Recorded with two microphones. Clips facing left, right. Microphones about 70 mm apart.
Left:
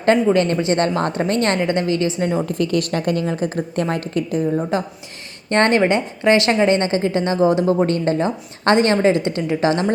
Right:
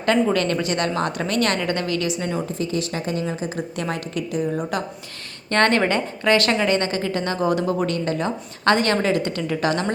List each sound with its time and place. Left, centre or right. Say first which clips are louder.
0.3 s a woman's voice: left 5 dB; left
2.5 s a woman's voice: left 5 dB; left
4.7 s a woman's voice: left 4 dB; left